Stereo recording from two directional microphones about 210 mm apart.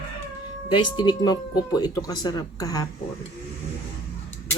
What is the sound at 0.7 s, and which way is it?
Speech, 20° left (ahead or behind).